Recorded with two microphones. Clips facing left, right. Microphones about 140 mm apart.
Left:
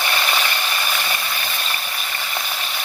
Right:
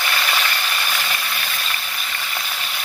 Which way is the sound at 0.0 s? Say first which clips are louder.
Left 1 dB; 25° left (ahead or behind).